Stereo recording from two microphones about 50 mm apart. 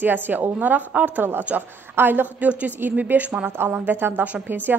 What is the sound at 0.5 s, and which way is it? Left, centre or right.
A woman's voice, right.